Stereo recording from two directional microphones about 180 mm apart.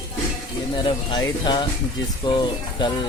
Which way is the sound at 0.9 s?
25° left (ahead or behind).